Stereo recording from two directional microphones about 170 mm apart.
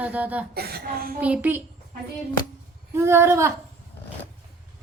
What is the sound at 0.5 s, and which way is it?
Speech, 65° right (ahead or behind).